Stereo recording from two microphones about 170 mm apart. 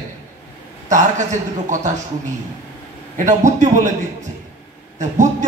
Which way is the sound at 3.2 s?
45° right (ahead or behind).